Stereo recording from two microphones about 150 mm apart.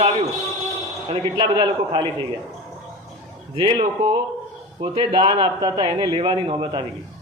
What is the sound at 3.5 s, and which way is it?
A man's voice, 30° right (ahead or behind).